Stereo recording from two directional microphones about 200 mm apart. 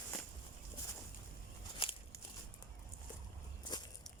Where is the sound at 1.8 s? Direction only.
25° left (ahead or behind).